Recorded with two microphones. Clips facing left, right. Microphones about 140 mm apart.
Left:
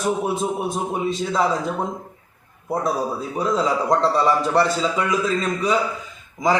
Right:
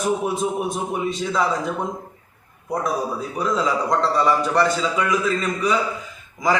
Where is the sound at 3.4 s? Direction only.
25° left (ahead or behind).